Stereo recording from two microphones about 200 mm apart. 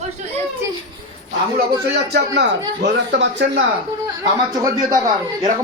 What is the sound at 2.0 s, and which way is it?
Speech, 55° right (ahead or behind).